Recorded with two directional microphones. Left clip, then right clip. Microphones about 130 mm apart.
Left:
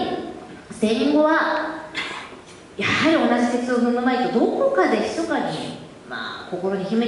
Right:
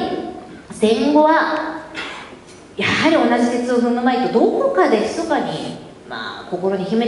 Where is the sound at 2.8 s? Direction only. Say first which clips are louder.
Right 3 dB; 20° right (ahead or behind).